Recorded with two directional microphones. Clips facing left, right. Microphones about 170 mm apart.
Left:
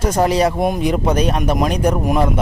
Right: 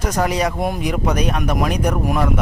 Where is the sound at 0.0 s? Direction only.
30° left (ahead or behind).